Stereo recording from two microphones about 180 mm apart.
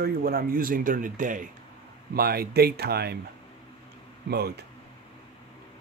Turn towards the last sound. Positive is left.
turn(degrees=-60)  # may be behind; listen again after turning